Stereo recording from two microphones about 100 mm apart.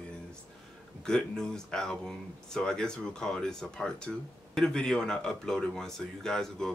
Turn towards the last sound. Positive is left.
turn(degrees=5)  # may be behind; listen again after turning